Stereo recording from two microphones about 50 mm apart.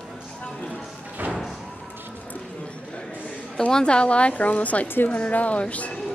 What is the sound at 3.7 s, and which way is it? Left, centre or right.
A woman's voice, centre.